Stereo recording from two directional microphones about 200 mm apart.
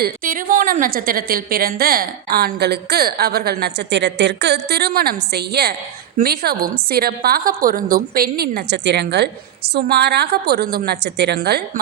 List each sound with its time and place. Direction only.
0.0 s a woman's voice: 45° right (ahead or behind)